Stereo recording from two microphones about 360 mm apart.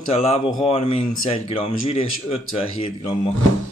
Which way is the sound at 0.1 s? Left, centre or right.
Centre.